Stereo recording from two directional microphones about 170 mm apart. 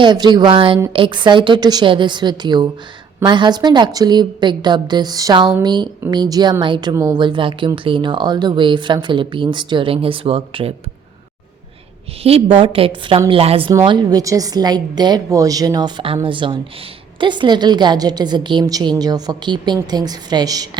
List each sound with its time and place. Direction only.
0.0 s a woman's voice: 25° right (ahead or behind)
12.2 s a woman's voice: 35° right (ahead or behind)
13.7 s a woman's voice: 25° right (ahead or behind)